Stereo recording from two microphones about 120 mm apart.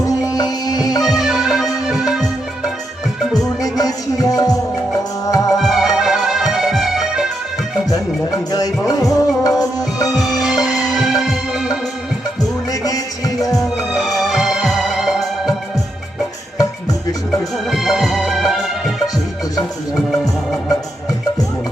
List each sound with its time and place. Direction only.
0.0 s music: 30° left (ahead or behind)
1.0 s music: 5° right (ahead or behind)
3.3 s music: 30° left (ahead or behind)
5.5 s music: centre (ahead or behind)
7.9 s music: 30° left (ahead or behind)
10.2 s music: centre (ahead or behind)
12.8 s music: 30° left (ahead or behind)
13.6 s music: centre (ahead or behind)
17.7 s music: centre (ahead or behind)
20.1 s music: centre (ahead or behind)